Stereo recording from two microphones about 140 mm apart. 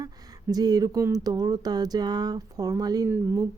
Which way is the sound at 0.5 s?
25° right (ahead or behind).